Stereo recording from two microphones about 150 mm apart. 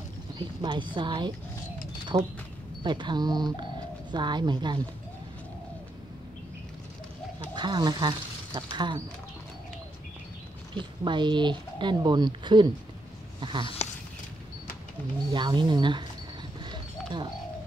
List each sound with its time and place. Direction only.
0.4 s a woman's voice: 30° right (ahead or behind)
7.5 s speech: 30° right (ahead or behind)
10.7 s a woman's voice: 30° right (ahead or behind)
13.4 s a sound: 30° right (ahead or behind)
15.3 s a woman's voice: 30° right (ahead or behind)